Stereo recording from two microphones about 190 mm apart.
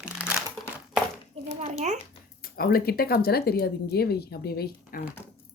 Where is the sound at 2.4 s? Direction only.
50° left (ahead or behind).